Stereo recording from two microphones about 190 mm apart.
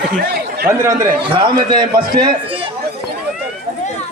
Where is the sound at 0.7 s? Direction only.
15° right (ahead or behind).